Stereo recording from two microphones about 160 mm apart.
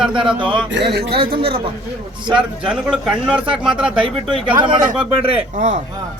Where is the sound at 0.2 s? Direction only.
30° right (ahead or behind).